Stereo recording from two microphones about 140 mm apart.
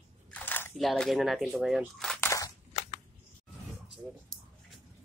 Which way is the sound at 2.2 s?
20° left (ahead or behind).